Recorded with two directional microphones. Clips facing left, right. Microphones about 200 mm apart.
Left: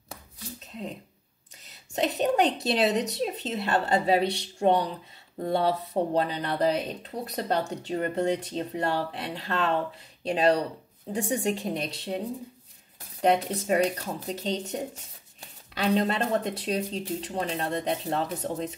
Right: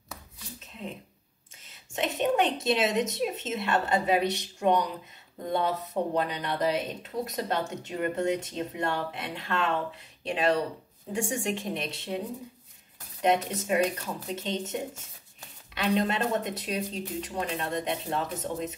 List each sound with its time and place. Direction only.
2.0 s speech: 35° left (ahead or behind)
13.2 s speech: 35° left (ahead or behind)